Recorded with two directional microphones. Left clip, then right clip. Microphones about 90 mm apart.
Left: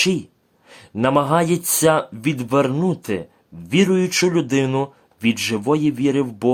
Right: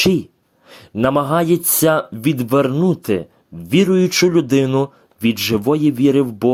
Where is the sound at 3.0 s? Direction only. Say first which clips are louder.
Right 5 dB; 40° right (ahead or behind).